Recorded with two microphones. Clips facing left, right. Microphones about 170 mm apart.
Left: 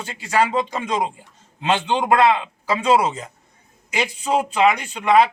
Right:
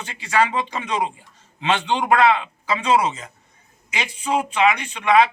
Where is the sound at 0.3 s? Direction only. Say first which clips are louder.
Left 1 dB; 40° left (ahead or behind).